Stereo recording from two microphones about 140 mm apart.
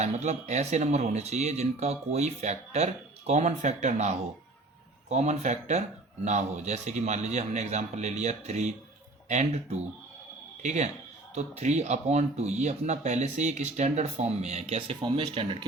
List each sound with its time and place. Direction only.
0.0 s speech: 55° right (ahead or behind)